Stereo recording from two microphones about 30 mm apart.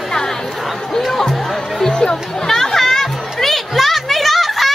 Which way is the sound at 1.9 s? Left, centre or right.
Left.